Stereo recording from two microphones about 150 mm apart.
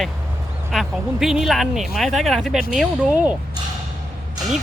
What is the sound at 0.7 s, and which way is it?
Speech, centre (ahead or behind).